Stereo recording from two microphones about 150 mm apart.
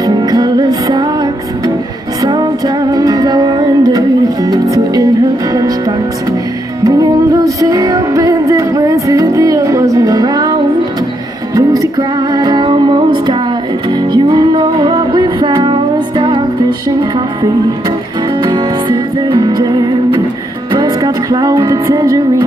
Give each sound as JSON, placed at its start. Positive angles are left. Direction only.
{"t": 0.0, "sound": "music", "side_deg": -25}
{"t": 2.9, "sound": "music", "side_deg": -25}
{"t": 18.4, "sound": "music", "side_deg": -30}